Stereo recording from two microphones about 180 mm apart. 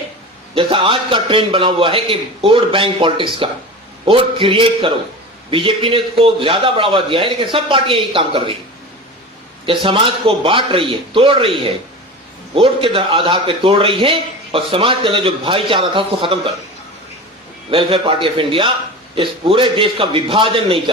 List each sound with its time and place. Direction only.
0.5 s a man's voice: 30° right (ahead or behind)
9.6 s a man's voice: 30° right (ahead or behind)
17.7 s a man's voice: 30° right (ahead or behind)